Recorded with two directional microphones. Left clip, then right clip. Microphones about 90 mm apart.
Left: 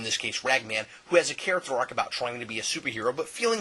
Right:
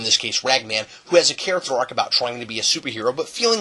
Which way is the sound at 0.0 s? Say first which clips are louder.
Right 9 dB; 20° right (ahead or behind).